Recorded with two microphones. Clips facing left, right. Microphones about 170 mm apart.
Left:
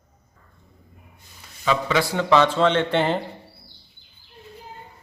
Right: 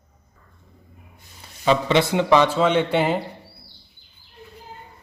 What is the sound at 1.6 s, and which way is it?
A man's voice, 30° right (ahead or behind).